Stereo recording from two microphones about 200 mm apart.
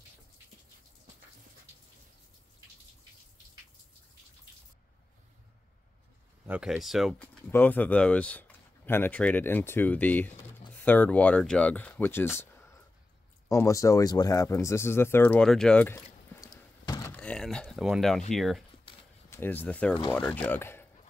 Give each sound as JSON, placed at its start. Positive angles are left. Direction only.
{"t": 6.4, "sound": "speech", "side_deg": -5}
{"t": 13.5, "sound": "speech", "side_deg": 15}
{"t": 17.1, "sound": "a sound", "side_deg": 5}
{"t": 18.3, "sound": "speech", "side_deg": 0}
{"t": 18.9, "sound": "a sound", "side_deg": 25}
{"t": 19.3, "sound": "speech", "side_deg": 10}